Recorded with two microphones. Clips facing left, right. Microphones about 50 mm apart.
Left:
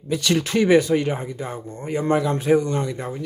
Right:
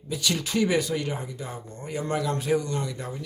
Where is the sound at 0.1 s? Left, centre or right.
Left.